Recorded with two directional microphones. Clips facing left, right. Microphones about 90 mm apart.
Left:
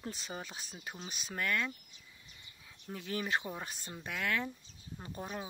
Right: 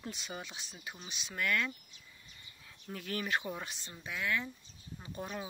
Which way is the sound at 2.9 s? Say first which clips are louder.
Even; 20° left (ahead or behind).